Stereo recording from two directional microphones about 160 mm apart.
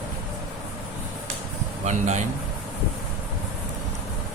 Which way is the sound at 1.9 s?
45° right (ahead or behind).